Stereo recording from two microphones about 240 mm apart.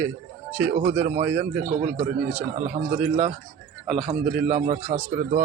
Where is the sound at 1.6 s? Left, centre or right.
Right.